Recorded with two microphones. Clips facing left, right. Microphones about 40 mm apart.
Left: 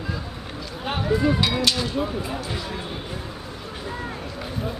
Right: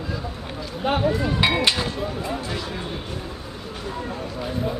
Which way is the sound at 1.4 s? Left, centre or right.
Right.